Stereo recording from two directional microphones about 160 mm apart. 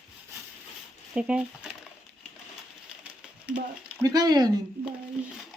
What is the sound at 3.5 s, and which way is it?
Speech, 10° right (ahead or behind).